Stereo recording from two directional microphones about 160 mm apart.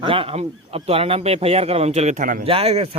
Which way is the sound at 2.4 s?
35° right (ahead or behind).